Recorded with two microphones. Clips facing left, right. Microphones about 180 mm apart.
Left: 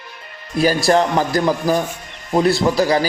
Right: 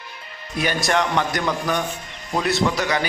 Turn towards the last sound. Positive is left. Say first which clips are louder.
# left 5 dB
turn(degrees=35)  # may be behind; listen again after turning